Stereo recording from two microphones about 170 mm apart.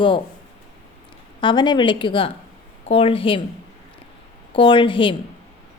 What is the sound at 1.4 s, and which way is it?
A woman's voice, 25° left (ahead or behind).